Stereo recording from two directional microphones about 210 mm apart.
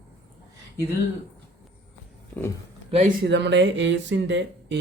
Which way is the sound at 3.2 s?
55° right (ahead or behind).